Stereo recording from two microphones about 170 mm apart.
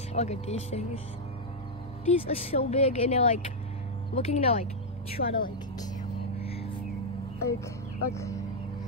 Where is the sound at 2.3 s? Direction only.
35° left (ahead or behind).